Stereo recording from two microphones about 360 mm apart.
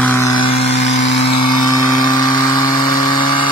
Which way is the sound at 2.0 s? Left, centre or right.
Centre.